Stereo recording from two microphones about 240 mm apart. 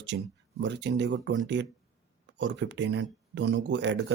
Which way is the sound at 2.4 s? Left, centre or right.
Right.